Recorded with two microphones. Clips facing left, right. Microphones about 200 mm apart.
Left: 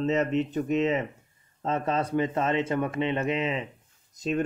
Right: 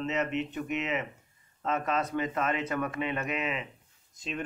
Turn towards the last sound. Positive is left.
turn(degrees=40)  # may be behind; listen again after turning